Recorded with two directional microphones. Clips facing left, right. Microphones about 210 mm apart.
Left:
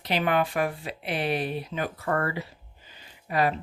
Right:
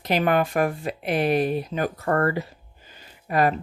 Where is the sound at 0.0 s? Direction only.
45° right (ahead or behind).